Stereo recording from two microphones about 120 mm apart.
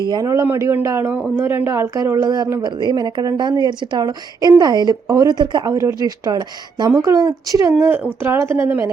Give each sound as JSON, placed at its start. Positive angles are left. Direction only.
{"t": 0.1, "sound": "a woman's voice", "side_deg": -25}